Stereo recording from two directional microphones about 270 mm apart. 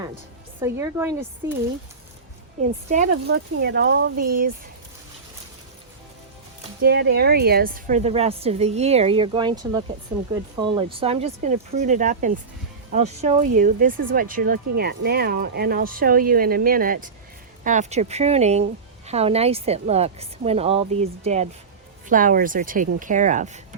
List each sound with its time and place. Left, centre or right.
0.6 s speech: centre
2.6 s a woman's voice: right
6.8 s a woman's voice: right